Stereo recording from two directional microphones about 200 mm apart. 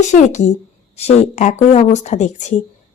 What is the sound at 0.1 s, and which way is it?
Speech, 35° left (ahead or behind).